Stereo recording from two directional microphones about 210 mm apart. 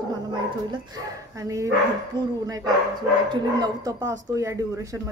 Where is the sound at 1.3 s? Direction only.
15° right (ahead or behind).